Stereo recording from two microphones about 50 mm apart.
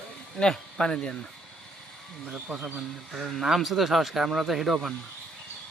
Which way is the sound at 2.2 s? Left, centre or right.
Centre.